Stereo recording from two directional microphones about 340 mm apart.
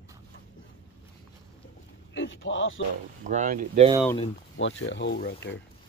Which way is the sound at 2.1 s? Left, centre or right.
Left.